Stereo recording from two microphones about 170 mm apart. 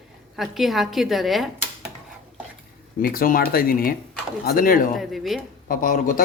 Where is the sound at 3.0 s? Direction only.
60° left (ahead or behind).